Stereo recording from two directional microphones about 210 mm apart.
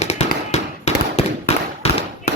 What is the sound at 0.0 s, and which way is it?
Fireworks, 30° left (ahead or behind).